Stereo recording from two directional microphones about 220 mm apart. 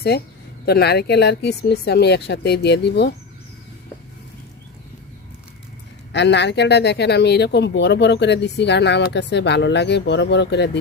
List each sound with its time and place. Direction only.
0.1 s speech: 45° left (ahead or behind)
6.1 s speech: 55° left (ahead or behind)